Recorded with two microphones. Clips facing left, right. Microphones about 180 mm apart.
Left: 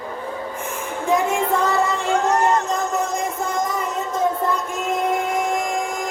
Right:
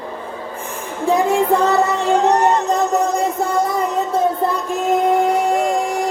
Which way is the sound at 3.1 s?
35° right (ahead or behind).